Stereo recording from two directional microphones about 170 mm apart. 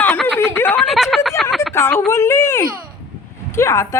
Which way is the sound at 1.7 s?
15° left (ahead or behind).